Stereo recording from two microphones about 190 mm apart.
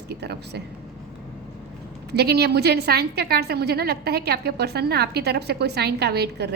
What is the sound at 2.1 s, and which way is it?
A woman's voice, 60° right (ahead or behind).